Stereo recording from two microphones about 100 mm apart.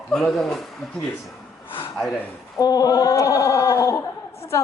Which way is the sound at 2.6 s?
40° left (ahead or behind).